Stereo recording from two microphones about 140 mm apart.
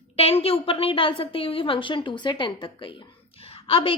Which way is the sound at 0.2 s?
45° left (ahead or behind).